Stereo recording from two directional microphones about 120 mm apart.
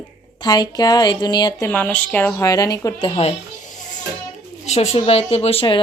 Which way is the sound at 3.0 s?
50° left (ahead or behind).